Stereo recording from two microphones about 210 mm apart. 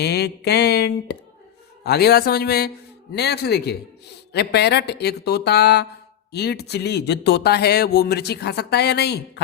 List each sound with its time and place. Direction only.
0.0 s speech: 50° left (ahead or behind)